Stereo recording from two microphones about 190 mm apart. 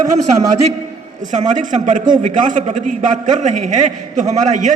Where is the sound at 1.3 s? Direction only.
40° right (ahead or behind).